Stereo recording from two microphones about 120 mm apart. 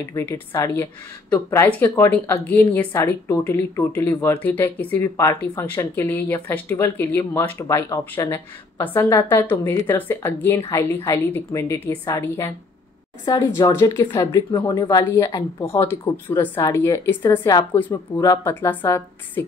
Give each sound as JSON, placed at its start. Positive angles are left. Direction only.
{"t": 0.1, "sound": "a woman's voice", "side_deg": 20}
{"t": 2.0, "sound": "a woman's voice", "side_deg": 15}
{"t": 13.2, "sound": "a woman's voice", "side_deg": 30}
{"t": 14.0, "sound": "a woman's voice", "side_deg": 35}
{"t": 18.2, "sound": "a woman's voice", "side_deg": 25}